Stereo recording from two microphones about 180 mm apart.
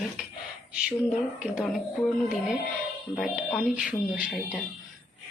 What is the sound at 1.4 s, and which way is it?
Speech, 5° right (ahead or behind).